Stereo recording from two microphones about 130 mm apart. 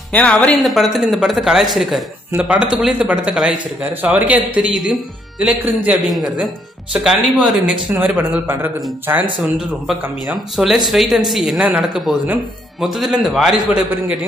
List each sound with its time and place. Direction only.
0.1 s speech: 10° left (ahead or behind); by 5.9 s 10° right (ahead or behind)
6.0 s speech: centre (ahead or behind); by 9.2 s 15° right (ahead or behind)
9.4 s speech: centre (ahead or behind)